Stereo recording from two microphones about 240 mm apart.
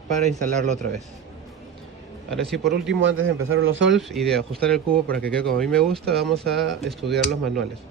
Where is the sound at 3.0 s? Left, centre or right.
Right.